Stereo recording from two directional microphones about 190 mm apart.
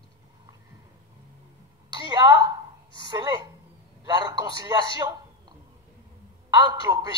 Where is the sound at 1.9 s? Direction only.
20° right (ahead or behind).